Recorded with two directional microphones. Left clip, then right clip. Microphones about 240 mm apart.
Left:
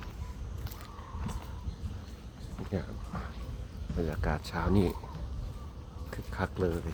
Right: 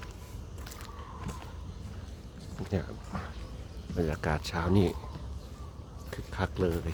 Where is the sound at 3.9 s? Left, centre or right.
Centre.